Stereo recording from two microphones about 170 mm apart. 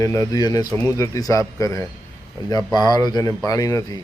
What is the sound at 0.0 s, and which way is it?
Speech, 20° left (ahead or behind).